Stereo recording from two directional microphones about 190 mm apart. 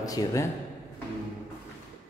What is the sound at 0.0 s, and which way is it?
Speech, 20° left (ahead or behind).